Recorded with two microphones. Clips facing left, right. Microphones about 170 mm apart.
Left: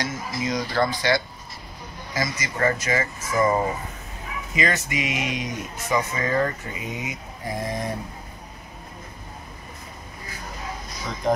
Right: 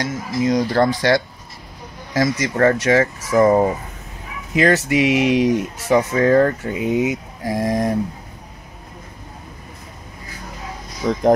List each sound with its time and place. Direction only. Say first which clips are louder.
0.0 s speech: right 7 dB; 40° right (ahead or behind)
0.7 s speech: right 6 dB; 75° right (ahead or behind); by 7.9 s 90° right